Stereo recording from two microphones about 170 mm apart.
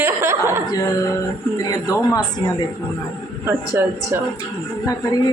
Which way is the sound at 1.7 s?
20° left (ahead or behind).